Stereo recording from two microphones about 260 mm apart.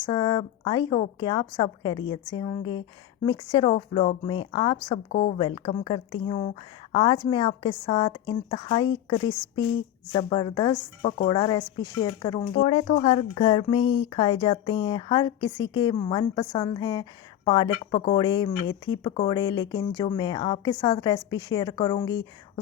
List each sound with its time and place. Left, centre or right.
0.1 s speech: centre
5.1 s speech: left
5.4 s speech: centre
12.6 s speech: left